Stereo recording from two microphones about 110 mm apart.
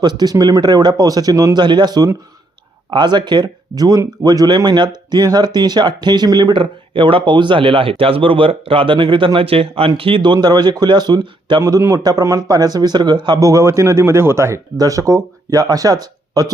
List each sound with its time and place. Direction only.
0.0 s speech: 40° right (ahead or behind)
11.6 s a man's voice: 30° right (ahead or behind)